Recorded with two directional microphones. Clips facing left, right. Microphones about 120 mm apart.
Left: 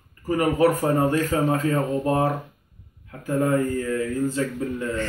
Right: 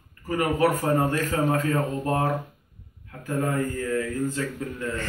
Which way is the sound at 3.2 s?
25° left (ahead or behind).